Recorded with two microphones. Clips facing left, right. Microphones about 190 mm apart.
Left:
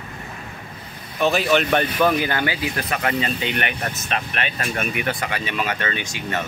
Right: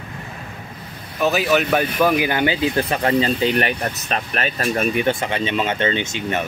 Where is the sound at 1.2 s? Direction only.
5° right (ahead or behind); by 6.4 s 25° right (ahead or behind).